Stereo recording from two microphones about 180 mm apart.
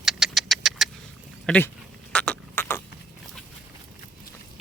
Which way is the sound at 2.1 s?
5° left (ahead or behind).